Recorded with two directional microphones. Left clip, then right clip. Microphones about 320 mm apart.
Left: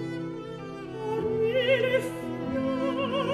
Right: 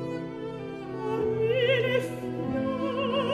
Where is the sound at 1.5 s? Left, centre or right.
Centre.